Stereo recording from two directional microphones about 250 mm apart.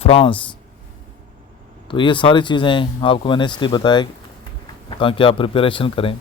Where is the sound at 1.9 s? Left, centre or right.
Centre.